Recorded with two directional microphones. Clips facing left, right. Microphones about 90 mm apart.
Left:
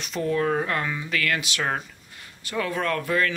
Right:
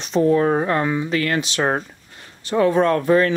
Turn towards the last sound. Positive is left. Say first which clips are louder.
# right 8 dB
turn(degrees=-30)  # may be behind; listen again after turning